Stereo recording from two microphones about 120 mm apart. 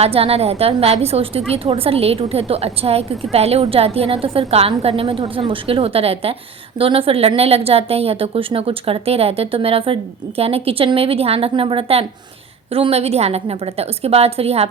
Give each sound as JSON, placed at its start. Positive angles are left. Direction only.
{"t": 0.0, "sound": "a woman's voice", "side_deg": -55}